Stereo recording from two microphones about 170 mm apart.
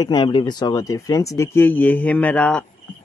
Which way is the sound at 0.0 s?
25° left (ahead or behind).